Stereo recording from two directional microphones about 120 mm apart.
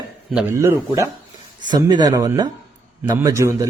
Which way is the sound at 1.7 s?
35° right (ahead or behind).